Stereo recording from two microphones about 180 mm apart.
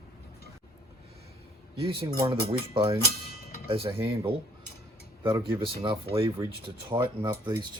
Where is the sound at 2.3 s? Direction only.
30° right (ahead or behind).